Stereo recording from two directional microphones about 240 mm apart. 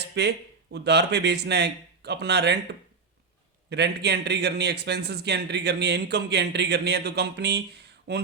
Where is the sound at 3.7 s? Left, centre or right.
Right.